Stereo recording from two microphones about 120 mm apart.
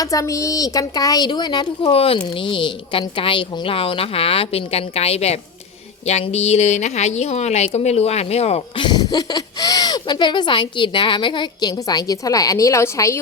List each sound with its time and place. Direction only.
0.0 s speech: 30° left (ahead or behind)
1.9 s a woman's voice: 55° left (ahead or behind)
2.1 s a woman's voice: 40° left (ahead or behind); by 8.6 s 60° left (ahead or behind)
8.7 s speech: 40° left (ahead or behind); by 13.1 s 25° left (ahead or behind)